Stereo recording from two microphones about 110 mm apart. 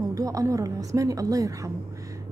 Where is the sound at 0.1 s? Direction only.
30° right (ahead or behind).